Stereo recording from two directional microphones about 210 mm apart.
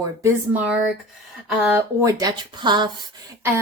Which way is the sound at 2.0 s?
20° right (ahead or behind).